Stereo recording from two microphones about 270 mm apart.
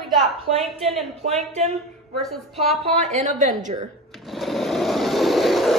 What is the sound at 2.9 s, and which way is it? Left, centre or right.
Speech, right.